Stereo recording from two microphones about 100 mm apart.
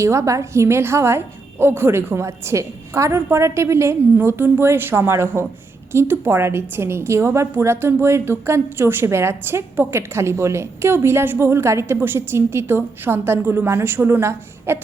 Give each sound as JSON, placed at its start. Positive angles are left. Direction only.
{"t": 0.0, "sound": "a woman's voice", "side_deg": -30}